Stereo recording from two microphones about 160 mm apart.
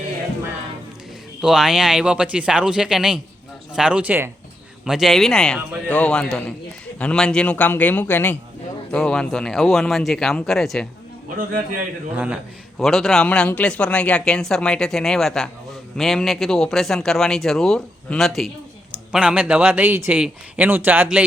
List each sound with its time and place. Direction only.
1.4 s a man's voice: 5° right (ahead or behind)
11.3 s a man's voice: 60° right (ahead or behind)
12.1 s speech: 10° right (ahead or behind)
12.8 s speech: centre (ahead or behind)